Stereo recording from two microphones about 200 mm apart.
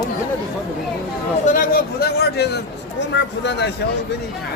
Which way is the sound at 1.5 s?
50° left (ahead or behind).